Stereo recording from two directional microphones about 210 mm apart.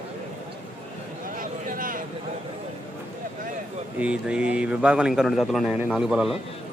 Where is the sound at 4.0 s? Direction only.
5° right (ahead or behind).